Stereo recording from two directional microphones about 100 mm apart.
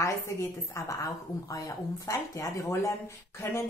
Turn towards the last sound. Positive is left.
turn(degrees=25)  # may be behind; listen again after turning